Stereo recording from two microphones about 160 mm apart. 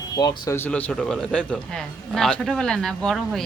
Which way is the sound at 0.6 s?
10° left (ahead or behind).